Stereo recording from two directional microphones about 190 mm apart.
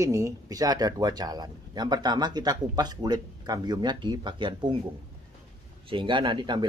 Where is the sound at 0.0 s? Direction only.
15° right (ahead or behind).